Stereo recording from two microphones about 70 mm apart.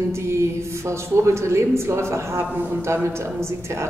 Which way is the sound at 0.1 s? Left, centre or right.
Right.